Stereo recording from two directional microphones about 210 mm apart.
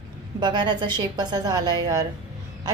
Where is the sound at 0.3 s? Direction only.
20° right (ahead or behind).